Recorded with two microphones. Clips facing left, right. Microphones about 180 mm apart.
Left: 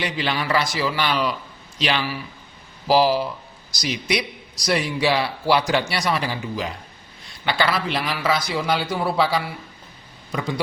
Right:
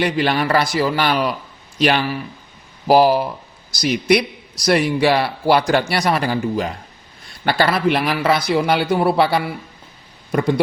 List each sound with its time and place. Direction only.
0.0 s a man's voice: 55° right (ahead or behind)